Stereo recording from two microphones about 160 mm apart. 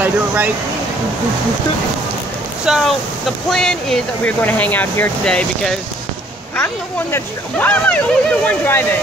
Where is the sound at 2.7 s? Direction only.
5° right (ahead or behind); by 8.8 s 10° left (ahead or behind).